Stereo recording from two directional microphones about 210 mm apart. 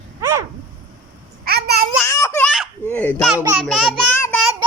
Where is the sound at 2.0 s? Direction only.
15° left (ahead or behind).